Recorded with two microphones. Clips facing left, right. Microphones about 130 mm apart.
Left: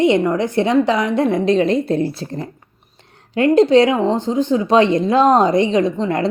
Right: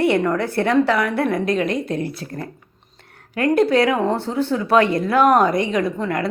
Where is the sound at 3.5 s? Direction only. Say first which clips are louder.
Left 4 dB; 25° left (ahead or behind).